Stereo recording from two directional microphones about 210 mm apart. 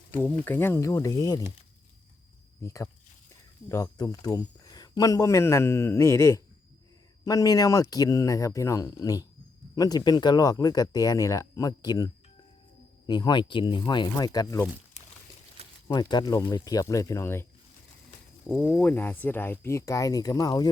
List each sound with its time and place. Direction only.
0.4 s speech: 10° left (ahead or behind)
2.6 s speech: 15° left (ahead or behind)
15.9 s speech: 20° left (ahead or behind)
18.4 s speech: centre (ahead or behind); by 20.7 s 20° left (ahead or behind)